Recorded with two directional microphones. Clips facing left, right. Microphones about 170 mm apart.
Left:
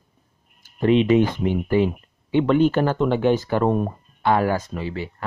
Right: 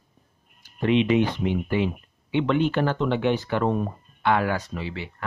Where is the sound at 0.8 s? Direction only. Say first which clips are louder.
Left 4 dB; 40° left (ahead or behind).